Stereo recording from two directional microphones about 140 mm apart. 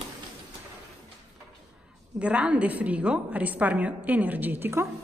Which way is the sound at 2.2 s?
10° right (ahead or behind).